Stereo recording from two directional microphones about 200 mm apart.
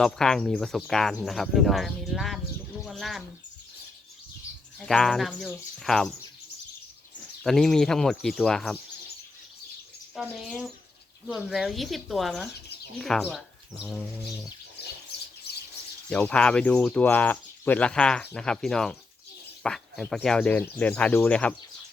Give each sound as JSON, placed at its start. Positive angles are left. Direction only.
{"t": 0.0, "sound": "speech", "side_deg": 5}
{"t": 2.8, "sound": "bird", "side_deg": 0}
{"t": 4.9, "sound": "speech", "side_deg": 0}
{"t": 7.4, "sound": "speech", "side_deg": 0}
{"t": 10.2, "sound": "speech", "side_deg": 0}
{"t": 15.5, "sound": "bird", "side_deg": 55}
{"t": 16.0, "sound": "speech", "side_deg": 5}